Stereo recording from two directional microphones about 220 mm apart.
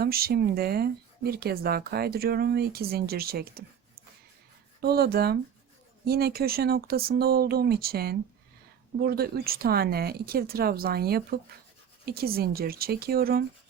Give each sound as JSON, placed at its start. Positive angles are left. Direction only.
{"t": 0.0, "sound": "speech", "side_deg": -45}
{"t": 4.8, "sound": "speech", "side_deg": -45}